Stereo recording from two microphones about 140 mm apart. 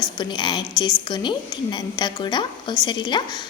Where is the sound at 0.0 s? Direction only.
30° left (ahead or behind).